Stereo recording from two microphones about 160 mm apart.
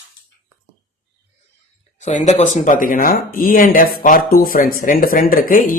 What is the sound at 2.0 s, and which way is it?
Speech, 45° left (ahead or behind).